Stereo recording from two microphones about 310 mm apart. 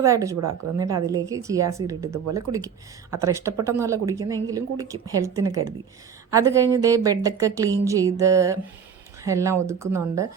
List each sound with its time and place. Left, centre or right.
0.0 s a woman's voice: centre